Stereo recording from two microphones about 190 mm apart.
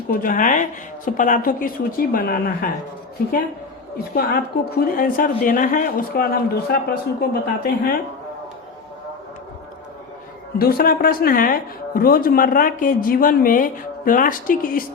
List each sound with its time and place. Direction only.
0.1 s speech: 45° left (ahead or behind)
4.1 s speech: 55° left (ahead or behind)
10.6 s speech: 50° left (ahead or behind)